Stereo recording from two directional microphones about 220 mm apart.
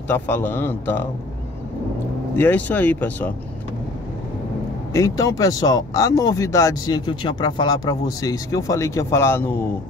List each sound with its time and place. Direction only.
0.1 s speech: 10° left (ahead or behind)
2.3 s speech: 5° left (ahead or behind)
4.9 s speech: 15° left (ahead or behind)